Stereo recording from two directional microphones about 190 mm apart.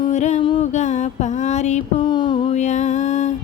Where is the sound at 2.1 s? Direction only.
25° left (ahead or behind).